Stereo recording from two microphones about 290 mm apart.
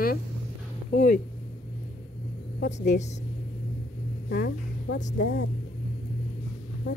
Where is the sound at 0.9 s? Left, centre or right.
Left.